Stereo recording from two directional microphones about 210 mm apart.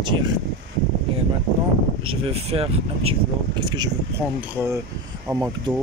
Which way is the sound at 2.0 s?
30° right (ahead or behind).